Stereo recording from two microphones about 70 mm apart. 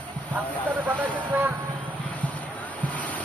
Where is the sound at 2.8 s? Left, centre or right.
Left.